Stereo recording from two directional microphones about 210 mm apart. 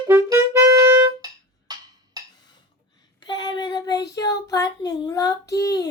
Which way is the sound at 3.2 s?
20° left (ahead or behind).